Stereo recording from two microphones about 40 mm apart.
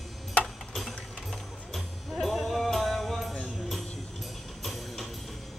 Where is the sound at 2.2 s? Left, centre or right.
Centre.